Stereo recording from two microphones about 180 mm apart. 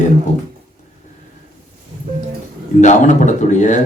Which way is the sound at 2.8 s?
40° left (ahead or behind).